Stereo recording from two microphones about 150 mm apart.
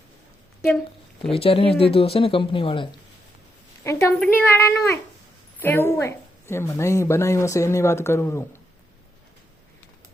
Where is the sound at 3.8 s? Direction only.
20° left (ahead or behind).